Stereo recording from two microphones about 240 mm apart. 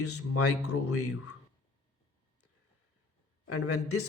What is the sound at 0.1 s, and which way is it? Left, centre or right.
Speech, left.